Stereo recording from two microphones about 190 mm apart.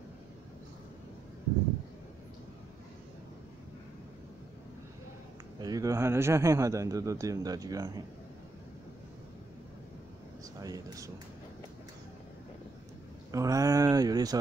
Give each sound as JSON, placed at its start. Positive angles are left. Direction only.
{"t": 5.6, "sound": "speech", "side_deg": -20}
{"t": 10.6, "sound": "speech", "side_deg": -20}
{"t": 13.3, "sound": "speech", "side_deg": -15}